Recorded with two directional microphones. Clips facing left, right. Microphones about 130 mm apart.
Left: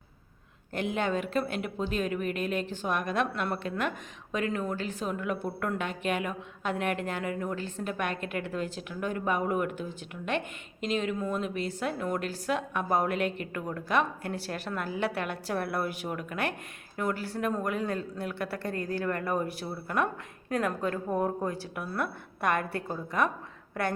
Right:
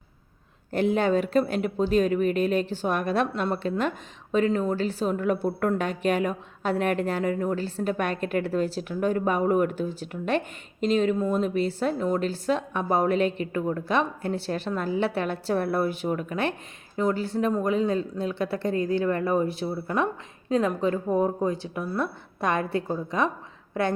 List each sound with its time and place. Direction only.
0.7 s a woman's voice: 35° right (ahead or behind)